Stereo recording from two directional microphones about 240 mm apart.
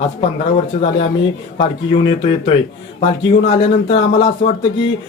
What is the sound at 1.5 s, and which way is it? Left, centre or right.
Speech, left.